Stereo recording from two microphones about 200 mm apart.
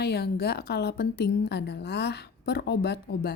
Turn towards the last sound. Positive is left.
turn(degrees=55)  # may be behind; listen again after turning